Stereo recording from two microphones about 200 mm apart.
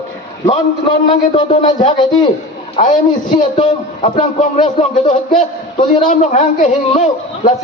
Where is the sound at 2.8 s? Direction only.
40° left (ahead or behind).